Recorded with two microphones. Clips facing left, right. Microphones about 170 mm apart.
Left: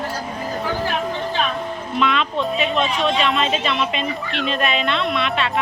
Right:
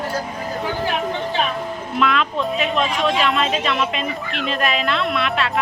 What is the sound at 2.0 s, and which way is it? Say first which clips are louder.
Speech: even; centre (ahead or behind).